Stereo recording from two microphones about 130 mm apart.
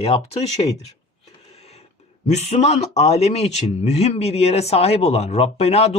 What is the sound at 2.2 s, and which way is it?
A man's voice, 60° left (ahead or behind).